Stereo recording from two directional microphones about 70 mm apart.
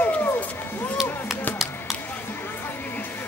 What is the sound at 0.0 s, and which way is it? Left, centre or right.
Run, left.